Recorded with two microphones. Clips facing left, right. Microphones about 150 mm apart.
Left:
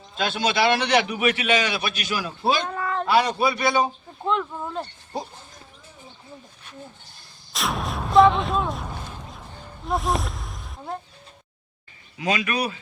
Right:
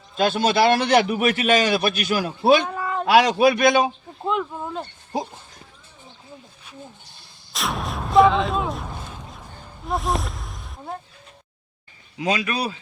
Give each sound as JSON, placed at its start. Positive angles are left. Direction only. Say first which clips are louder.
{"t": 0.2, "sound": "a man's voice", "louder": "right 4 dB", "side_deg": -45}
{"t": 2.6, "sound": "a sound", "louder": "right 1 dB", "side_deg": -10}
{"t": 3.1, "sound": "a man's voice", "louder": "right 6 dB", "side_deg": -90}
{"t": 4.2, "sound": "speech", "louder": "even", "side_deg": -10}
{"t": 7.5, "sound": "artillery fire", "louder": "even", "side_deg": 0}